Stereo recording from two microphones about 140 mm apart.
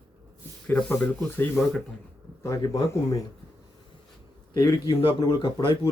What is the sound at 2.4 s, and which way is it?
Speech, 25° left (ahead or behind).